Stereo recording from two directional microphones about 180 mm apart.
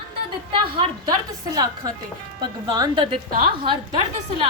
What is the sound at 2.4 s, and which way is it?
A woman's voice, 25° right (ahead or behind).